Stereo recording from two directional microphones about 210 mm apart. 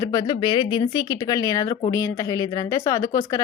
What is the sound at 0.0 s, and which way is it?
A woman's voice, 15° left (ahead or behind).